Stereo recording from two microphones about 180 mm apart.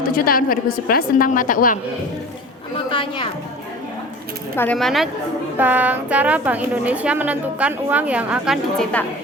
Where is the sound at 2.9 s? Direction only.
30° left (ahead or behind).